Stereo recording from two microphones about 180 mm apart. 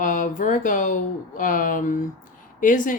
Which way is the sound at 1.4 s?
50° left (ahead or behind).